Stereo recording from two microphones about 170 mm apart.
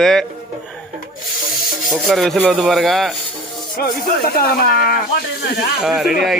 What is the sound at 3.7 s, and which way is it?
Speech, 60° left (ahead or behind).